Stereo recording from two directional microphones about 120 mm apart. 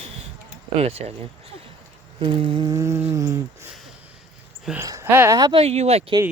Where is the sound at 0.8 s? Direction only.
60° right (ahead or behind).